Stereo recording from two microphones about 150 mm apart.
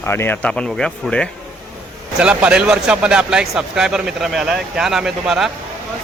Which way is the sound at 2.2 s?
5° right (ahead or behind).